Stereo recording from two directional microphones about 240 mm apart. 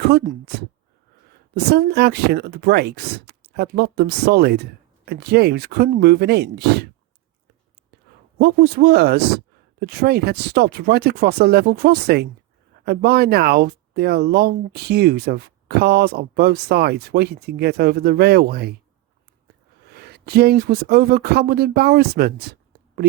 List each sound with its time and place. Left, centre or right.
0.1 s speech: right
1.5 s speech: right
8.4 s speech: right
19.9 s speech: right